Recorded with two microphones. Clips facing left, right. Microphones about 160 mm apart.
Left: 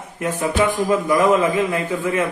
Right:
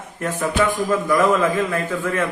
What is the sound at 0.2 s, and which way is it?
A man's voice, 15° left (ahead or behind).